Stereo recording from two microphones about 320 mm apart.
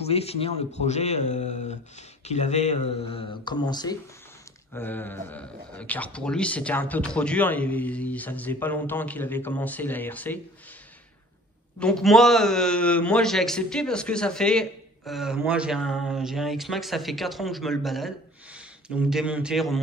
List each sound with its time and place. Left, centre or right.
0.0 s a man's voice: centre
11.8 s a man's voice: centre